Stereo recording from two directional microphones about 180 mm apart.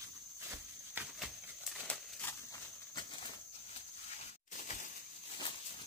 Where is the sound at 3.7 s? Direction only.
40° left (ahead or behind).